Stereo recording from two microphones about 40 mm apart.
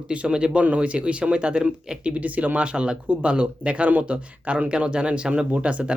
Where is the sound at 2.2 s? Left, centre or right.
Right.